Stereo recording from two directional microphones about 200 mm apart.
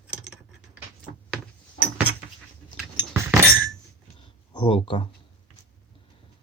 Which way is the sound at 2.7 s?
10° right (ahead or behind).